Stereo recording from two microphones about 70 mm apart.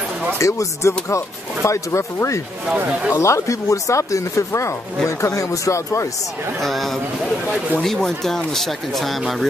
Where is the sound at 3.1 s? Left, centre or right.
Left.